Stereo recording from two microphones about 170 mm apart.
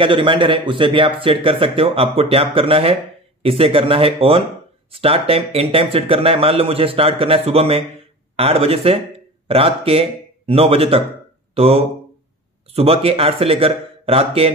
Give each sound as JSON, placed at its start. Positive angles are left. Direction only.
{"t": 0.0, "sound": "speech", "side_deg": -30}